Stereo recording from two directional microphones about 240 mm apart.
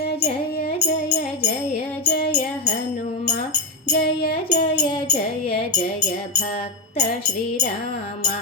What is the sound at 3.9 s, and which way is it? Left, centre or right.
Music, left.